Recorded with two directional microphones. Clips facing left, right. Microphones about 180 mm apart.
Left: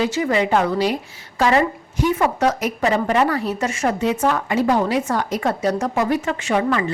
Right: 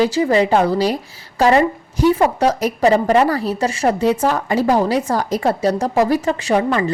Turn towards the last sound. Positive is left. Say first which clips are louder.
# right 3 dB
turn(degrees=-35)  # may be behind; listen again after turning